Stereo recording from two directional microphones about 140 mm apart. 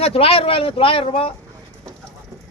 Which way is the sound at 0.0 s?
45° left (ahead or behind).